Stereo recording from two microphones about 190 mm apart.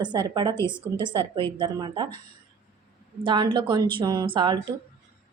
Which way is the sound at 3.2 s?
25° right (ahead or behind).